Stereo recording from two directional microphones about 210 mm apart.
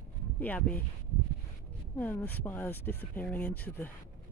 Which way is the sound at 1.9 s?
10° left (ahead or behind).